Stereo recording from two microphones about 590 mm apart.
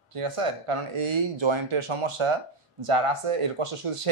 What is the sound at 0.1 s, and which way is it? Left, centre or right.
A man's voice, right.